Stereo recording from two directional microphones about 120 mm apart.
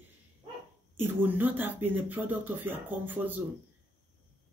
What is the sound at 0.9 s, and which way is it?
Speech, 15° right (ahead or behind).